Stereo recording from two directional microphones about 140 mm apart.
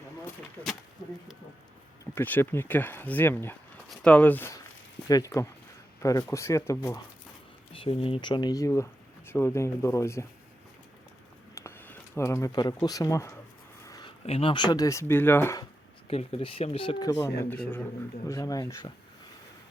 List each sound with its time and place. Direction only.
2.1 s speech: 15° left (ahead or behind)
3.8 s speech: 5° left (ahead or behind); by 7.0 s 20° left (ahead or behind)
7.7 s speech: 40° left (ahead or behind); by 10.2 s 20° left (ahead or behind)
11.5 s speech: 15° left (ahead or behind)
13.8 s a sound: 25° left (ahead or behind)
14.3 s speech: 40° left (ahead or behind); by 15.5 s 15° left (ahead or behind)
16.0 s speech: 45° left (ahead or behind)
17.1 s speech: 20° left (ahead or behind)